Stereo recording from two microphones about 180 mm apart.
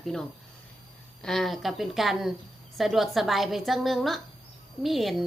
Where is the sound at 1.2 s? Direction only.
Centre (ahead or behind).